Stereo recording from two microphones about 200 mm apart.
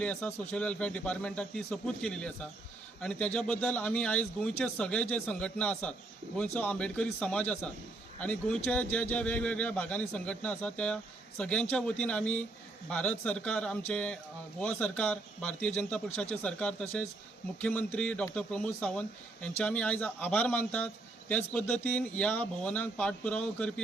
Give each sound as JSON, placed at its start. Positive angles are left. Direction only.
{"t": 0.0, "sound": "a man's voice", "side_deg": 5}